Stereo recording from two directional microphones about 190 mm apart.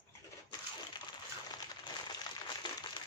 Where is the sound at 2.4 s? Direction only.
25° left (ahead or behind).